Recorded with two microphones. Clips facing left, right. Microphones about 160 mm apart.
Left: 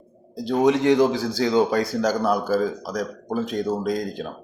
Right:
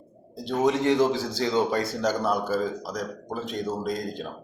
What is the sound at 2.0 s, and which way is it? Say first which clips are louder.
A man's voice: left 3 dB; centre (ahead or behind).